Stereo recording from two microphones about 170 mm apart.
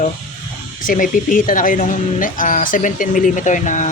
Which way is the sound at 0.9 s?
55° left (ahead or behind).